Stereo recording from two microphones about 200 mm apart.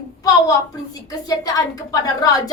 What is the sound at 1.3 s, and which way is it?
A woman's voice, 20° left (ahead or behind).